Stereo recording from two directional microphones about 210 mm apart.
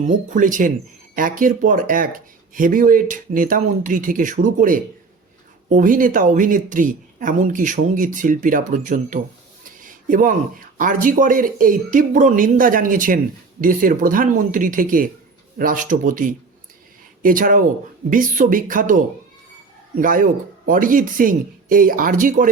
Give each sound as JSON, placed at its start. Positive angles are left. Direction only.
{"t": 0.0, "sound": "speech", "side_deg": -35}